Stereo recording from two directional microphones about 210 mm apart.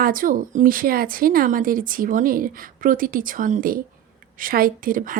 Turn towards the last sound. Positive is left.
turn(degrees=-40)  # may be behind; listen again after turning